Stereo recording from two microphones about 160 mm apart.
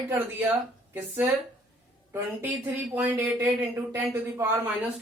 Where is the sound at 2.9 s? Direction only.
15° right (ahead or behind).